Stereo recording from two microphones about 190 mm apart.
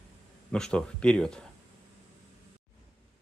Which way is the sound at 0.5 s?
5° left (ahead or behind).